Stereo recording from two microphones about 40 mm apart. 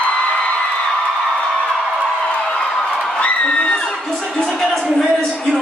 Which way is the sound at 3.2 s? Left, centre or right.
Left.